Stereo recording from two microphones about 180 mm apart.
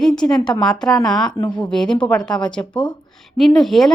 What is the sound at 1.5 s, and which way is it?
Speech, 5° left (ahead or behind).